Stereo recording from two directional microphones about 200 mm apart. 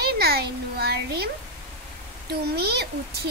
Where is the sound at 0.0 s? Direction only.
50° right (ahead or behind).